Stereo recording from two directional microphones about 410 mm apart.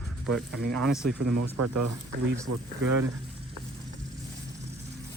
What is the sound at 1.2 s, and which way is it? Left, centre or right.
Speech, right.